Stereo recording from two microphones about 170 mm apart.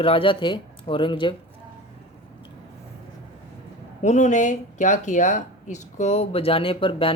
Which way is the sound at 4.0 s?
45° left (ahead or behind).